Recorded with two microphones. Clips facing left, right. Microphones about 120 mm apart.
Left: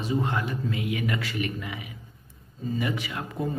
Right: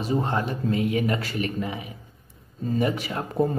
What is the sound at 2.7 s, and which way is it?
Speech, 35° right (ahead or behind).